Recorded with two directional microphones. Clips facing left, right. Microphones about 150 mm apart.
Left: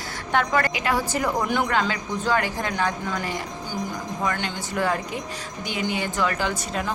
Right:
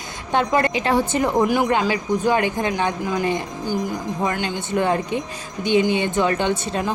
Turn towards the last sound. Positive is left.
turn(degrees=-25)  # may be behind; listen again after turning